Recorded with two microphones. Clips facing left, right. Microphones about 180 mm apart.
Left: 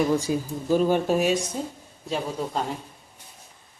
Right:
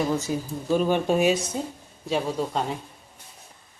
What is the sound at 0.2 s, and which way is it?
Speech, 10° left (ahead or behind).